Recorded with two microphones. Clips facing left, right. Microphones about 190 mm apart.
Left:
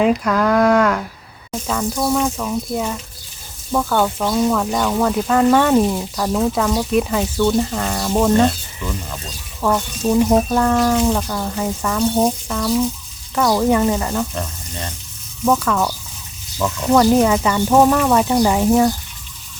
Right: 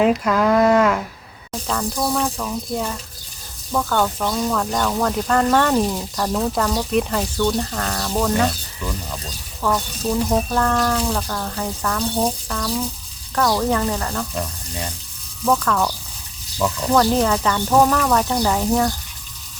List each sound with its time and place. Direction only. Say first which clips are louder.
0.0 s speech: left 1 dB; centre (ahead or behind)
9.6 s speech: left 3 dB; 15° left (ahead or behind)
14.3 s speech: even; 10° right (ahead or behind)
15.4 s speech: left 2 dB; 5° left (ahead or behind)